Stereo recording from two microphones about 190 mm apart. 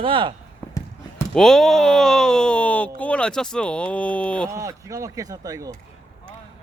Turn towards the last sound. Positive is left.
turn(degrees=-20)  # may be behind; listen again after turning